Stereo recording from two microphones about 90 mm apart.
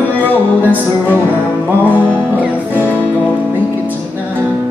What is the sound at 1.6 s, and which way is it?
Music, 20° right (ahead or behind).